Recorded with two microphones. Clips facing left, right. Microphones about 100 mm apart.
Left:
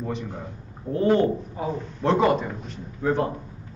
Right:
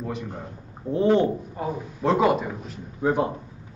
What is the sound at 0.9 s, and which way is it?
Speech, 20° right (ahead or behind).